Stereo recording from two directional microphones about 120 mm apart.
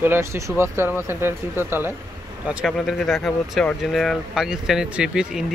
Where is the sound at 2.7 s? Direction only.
5° left (ahead or behind).